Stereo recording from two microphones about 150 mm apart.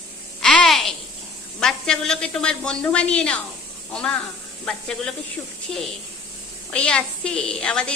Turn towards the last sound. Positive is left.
turn(degrees=5)  # may be behind; listen again after turning